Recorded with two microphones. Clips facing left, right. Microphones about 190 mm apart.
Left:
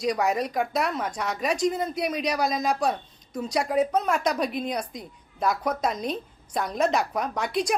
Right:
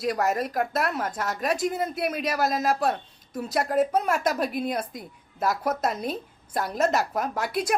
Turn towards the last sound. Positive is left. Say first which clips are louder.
# left 1 dB
turn(degrees=-5)  # may be behind; listen again after turning